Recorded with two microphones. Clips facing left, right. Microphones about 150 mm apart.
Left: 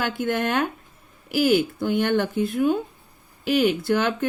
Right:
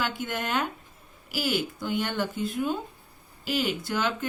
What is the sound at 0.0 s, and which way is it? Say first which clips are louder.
Speech: left 7 dB; 50° left (ahead or behind).